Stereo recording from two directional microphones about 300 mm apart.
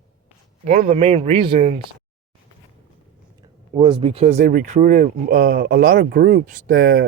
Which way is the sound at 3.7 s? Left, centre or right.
Centre.